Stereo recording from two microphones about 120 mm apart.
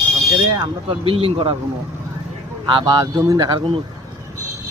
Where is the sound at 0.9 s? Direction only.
50° right (ahead or behind).